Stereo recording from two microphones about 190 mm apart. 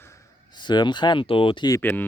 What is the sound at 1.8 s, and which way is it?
Speech, 10° left (ahead or behind).